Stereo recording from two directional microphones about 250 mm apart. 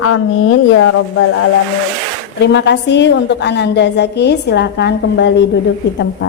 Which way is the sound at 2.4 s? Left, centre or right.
Left.